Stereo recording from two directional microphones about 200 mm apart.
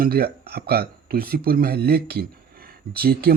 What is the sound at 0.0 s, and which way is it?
Speech, 50° right (ahead or behind).